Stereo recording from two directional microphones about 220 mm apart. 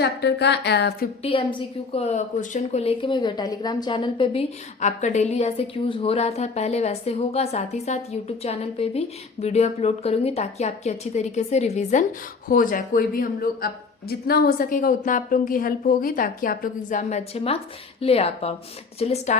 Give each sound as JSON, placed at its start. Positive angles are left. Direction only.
{"t": 0.0, "sound": "speech", "side_deg": 50}
{"t": 1.2, "sound": "a woman's voice", "side_deg": 25}